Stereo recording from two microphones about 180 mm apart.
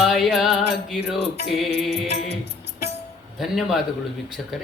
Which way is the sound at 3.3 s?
Centre (ahead or behind).